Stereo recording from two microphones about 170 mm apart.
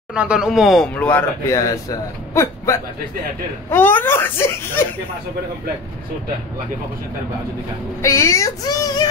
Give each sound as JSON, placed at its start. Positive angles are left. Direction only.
{"t": 0.1, "sound": "speech", "side_deg": -5}
{"t": 8.0, "sound": "speech", "side_deg": 15}